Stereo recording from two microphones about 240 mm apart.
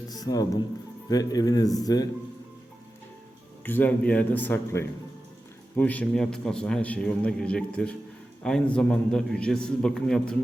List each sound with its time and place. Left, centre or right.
0.1 s speech: centre
3.6 s a man's voice: centre